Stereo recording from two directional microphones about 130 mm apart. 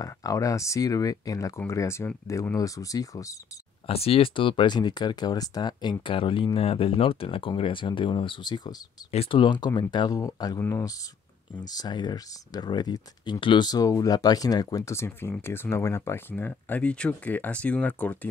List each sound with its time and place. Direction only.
0.0 s speech: 25° left (ahead or behind)
3.8 s speech: 50° left (ahead or behind); by 8.7 s 35° left (ahead or behind)
9.1 s speech: 45° left (ahead or behind); by 10.9 s 20° left (ahead or behind)
11.6 s speech: 30° left (ahead or behind); by 18.3 s 10° left (ahead or behind)